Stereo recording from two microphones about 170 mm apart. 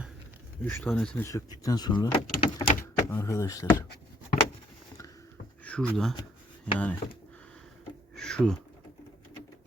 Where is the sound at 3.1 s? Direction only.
15° left (ahead or behind).